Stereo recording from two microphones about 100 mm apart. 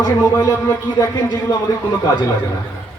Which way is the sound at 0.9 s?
40° left (ahead or behind).